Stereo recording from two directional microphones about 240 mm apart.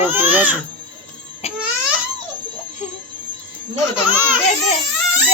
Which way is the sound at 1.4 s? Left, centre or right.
Left.